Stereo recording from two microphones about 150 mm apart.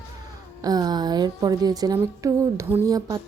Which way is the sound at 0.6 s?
25° right (ahead or behind).